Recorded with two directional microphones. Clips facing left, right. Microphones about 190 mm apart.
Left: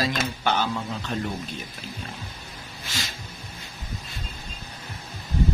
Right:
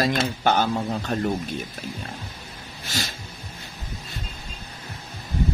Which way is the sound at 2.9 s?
40° right (ahead or behind).